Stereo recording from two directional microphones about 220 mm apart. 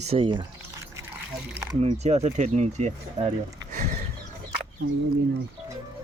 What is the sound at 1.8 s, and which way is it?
Speech, 30° right (ahead or behind).